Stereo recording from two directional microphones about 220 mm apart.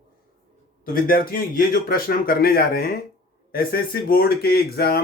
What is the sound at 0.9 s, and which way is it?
Speech, 40° left (ahead or behind).